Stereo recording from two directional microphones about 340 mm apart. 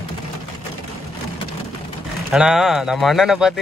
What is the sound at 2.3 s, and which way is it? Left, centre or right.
Speech, centre.